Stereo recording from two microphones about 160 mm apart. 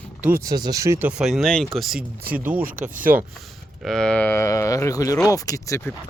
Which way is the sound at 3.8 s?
5° left (ahead or behind).